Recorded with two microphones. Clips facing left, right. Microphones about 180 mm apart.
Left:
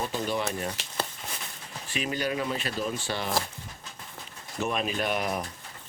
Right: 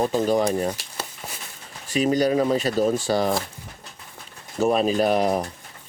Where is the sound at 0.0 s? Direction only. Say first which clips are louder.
Right 9 dB; 40° right (ahead or behind).